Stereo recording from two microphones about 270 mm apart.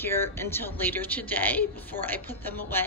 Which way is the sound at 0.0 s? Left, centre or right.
Centre.